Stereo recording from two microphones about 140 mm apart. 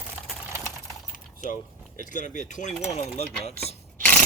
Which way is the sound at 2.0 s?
65° left (ahead or behind).